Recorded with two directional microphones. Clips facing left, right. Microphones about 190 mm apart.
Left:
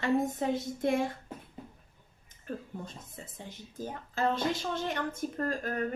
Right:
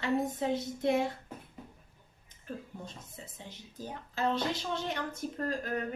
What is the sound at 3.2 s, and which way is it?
Speech, 50° left (ahead or behind).